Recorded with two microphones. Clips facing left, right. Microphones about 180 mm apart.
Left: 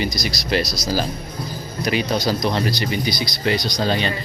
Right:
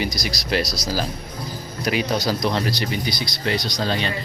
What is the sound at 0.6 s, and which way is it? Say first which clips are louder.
Speech: left 1 dB; 35° right (ahead or behind).